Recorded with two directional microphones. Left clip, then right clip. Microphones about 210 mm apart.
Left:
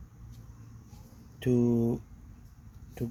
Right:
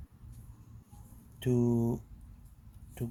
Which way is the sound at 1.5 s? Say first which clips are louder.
Left 3 dB; 40° right (ahead or behind).